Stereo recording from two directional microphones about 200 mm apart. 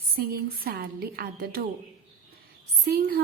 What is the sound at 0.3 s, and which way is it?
A woman's voice, 50° right (ahead or behind).